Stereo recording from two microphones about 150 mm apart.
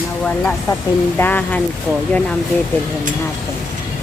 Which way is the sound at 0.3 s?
10° left (ahead or behind).